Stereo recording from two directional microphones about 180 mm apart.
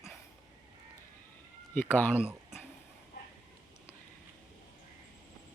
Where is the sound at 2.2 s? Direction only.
5° right (ahead or behind).